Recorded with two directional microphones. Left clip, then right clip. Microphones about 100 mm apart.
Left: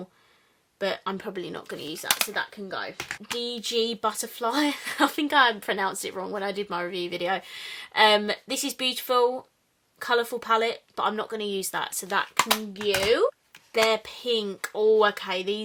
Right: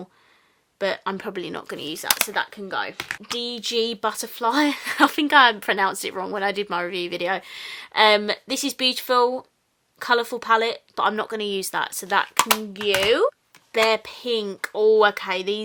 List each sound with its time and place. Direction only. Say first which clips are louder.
0.8 s speech: right 4 dB; 35° right (ahead or behind)
3.2 s speech: right 2 dB; 30° right (ahead or behind)